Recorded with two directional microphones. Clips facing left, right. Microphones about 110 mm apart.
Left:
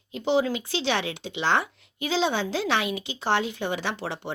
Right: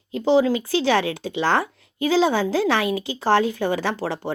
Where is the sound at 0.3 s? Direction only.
35° right (ahead or behind).